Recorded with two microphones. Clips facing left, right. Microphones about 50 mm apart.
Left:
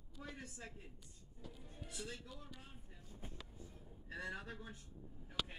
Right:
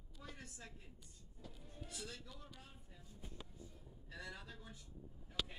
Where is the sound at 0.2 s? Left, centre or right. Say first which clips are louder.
Left 4 dB; left.